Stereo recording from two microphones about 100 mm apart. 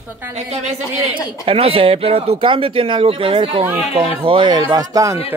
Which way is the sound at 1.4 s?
70° right (ahead or behind).